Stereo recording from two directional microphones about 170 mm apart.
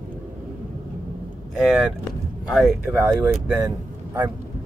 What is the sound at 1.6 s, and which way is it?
Speech, centre (ahead or behind).